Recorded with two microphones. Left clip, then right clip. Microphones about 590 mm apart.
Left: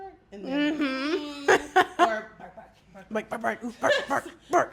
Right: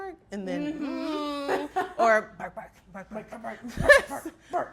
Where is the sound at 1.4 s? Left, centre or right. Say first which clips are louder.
Left 11 dB; left.